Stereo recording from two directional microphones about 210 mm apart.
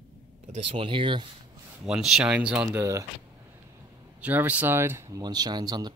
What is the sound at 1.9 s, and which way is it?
Speech, centre (ahead or behind).